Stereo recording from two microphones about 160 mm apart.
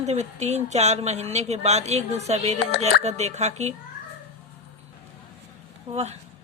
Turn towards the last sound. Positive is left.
turn(degrees=-40)  # may be behind; listen again after turning